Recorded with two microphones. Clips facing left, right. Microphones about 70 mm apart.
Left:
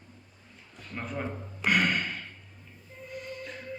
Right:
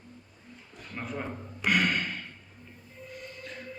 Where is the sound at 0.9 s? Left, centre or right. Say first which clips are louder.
Left 1 dB; centre.